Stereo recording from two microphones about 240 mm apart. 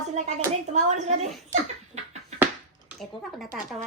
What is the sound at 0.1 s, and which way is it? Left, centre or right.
A child's voice, right.